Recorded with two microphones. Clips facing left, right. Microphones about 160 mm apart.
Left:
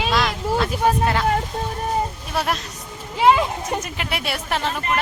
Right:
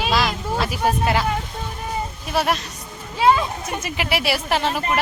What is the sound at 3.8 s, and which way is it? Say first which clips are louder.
Speech: right 4 dB; 5° right (ahead or behind).